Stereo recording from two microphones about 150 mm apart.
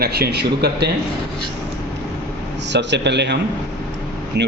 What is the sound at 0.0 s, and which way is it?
Speech, 90° right.